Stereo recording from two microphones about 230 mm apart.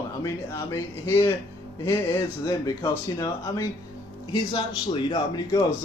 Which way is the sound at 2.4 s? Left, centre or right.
Centre.